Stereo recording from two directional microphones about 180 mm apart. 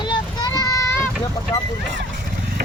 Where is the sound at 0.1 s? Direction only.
20° left (ahead or behind).